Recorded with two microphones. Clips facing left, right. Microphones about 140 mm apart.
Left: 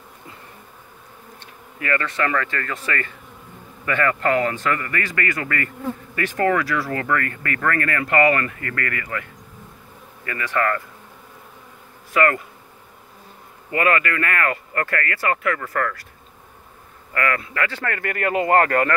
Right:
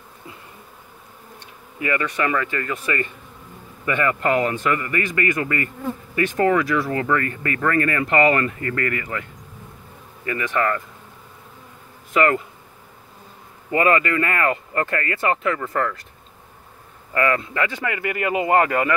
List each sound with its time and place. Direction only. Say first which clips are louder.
1.8 s speech: right 1 dB; 15° right (ahead or behind)
12.1 s speech: right 1 dB; 20° right (ahead or behind)
13.7 s speech: right 2 dB; 25° right (ahead or behind)
17.1 s speech: right 3 dB; 25° right (ahead or behind); by 18.9 s 5° right (ahead or behind)